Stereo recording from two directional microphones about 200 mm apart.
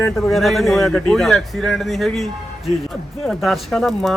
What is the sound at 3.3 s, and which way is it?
Speech, centre (ahead or behind).